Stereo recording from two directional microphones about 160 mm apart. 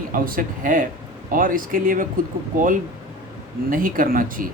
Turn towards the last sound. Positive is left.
turn(degrees=-60)  # may be behind; listen again after turning